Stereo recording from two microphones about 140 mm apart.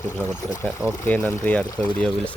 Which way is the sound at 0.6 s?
5° left (ahead or behind).